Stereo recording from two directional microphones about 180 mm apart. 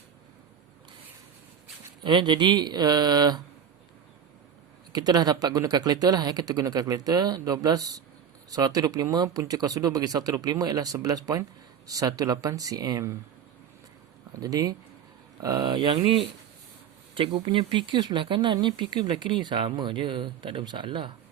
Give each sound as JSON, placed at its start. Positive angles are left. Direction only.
{"t": 2.0, "sound": "speech", "side_deg": -25}
{"t": 4.9, "sound": "speech", "side_deg": -20}
{"t": 14.3, "sound": "speech", "side_deg": -20}